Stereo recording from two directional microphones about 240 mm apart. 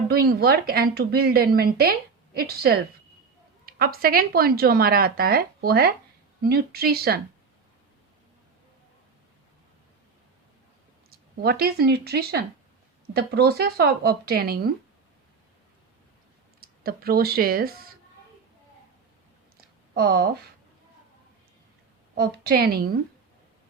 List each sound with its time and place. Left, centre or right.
0.1 s a woman's voice: right
11.1 s a woman's voice: right
16.6 s speech: right
19.9 s a woman's voice: right
22.1 s a woman's voice: right